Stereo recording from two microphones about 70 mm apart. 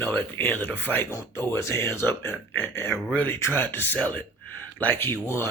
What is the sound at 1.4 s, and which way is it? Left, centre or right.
Speech, left.